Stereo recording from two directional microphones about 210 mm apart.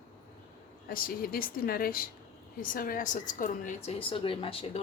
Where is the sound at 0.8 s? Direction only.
45° left (ahead or behind).